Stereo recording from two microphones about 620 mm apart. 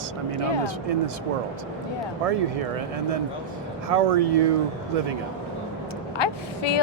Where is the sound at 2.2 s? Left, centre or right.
Right.